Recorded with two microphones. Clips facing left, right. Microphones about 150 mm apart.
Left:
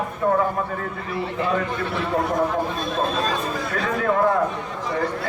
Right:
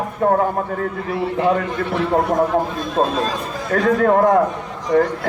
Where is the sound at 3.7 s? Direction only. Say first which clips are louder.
Right 9 dB; 50° right (ahead or behind).